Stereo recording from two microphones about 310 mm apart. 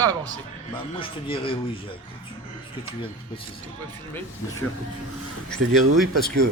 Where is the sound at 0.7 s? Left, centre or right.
Centre.